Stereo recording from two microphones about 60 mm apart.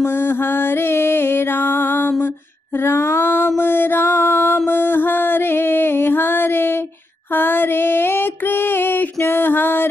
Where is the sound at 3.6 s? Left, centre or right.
Left.